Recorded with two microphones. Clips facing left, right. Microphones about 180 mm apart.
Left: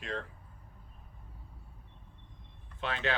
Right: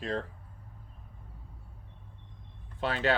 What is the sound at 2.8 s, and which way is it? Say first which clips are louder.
Speech: right 5 dB; 35° right (ahead or behind).